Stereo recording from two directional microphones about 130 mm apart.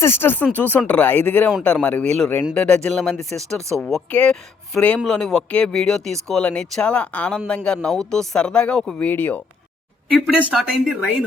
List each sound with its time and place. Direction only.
0.0 s speech: 15° left (ahead or behind)
10.1 s speech: 5° right (ahead or behind)